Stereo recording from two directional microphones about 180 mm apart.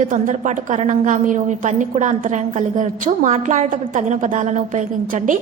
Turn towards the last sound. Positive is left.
turn(degrees=-45)  # may be behind; listen again after turning